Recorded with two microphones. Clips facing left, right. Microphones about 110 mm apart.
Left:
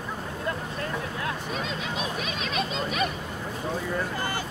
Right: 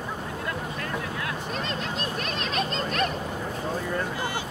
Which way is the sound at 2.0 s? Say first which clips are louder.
Even; 5° left (ahead or behind).